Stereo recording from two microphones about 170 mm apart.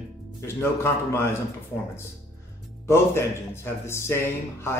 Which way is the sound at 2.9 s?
15° left (ahead or behind).